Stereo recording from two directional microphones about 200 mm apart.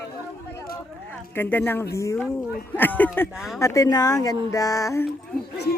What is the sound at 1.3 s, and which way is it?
Speech, 10° left (ahead or behind).